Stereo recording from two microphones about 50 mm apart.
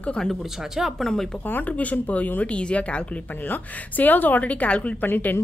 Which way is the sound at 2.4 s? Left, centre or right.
Left.